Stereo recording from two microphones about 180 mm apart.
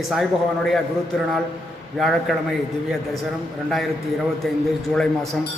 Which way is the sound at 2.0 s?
Centre (ahead or behind).